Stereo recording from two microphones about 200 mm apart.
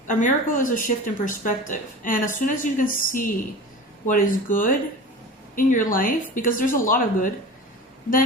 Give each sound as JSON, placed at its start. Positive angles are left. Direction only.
{"t": 0.1, "sound": "speech", "side_deg": 40}